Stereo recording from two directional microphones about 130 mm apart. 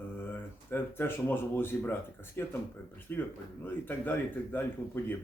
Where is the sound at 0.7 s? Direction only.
15° left (ahead or behind).